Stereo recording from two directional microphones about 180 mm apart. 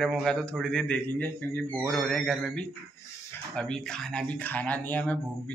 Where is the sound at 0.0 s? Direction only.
Centre (ahead or behind).